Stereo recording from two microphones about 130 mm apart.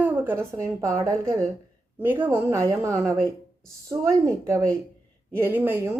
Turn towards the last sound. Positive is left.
turn(degrees=-15)  # may be behind; listen again after turning